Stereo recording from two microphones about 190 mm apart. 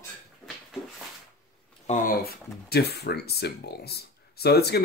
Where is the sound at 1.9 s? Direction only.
55° left (ahead or behind).